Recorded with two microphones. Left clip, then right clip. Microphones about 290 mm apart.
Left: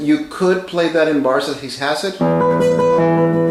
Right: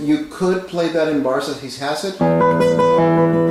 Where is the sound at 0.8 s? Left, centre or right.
Centre.